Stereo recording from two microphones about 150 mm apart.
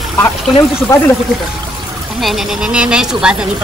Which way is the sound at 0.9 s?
20° left (ahead or behind).